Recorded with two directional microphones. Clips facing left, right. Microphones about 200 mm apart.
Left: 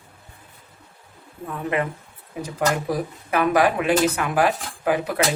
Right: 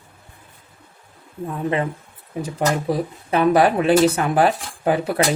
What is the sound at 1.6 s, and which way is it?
Speech, 25° right (ahead or behind).